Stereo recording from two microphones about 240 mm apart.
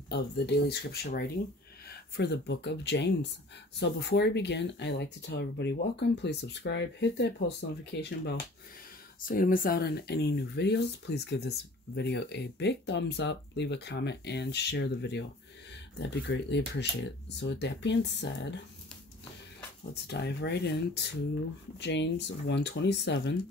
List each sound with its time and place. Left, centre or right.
0.1 s speech: left
9.3 s speech: left
20.1 s speech: left